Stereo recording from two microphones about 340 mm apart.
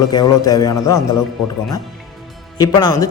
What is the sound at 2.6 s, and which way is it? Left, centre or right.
Speech, centre.